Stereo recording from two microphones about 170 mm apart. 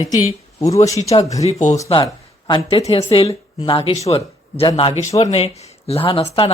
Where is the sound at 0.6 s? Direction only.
20° left (ahead or behind).